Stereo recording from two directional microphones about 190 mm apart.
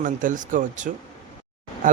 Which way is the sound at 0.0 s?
45° right (ahead or behind).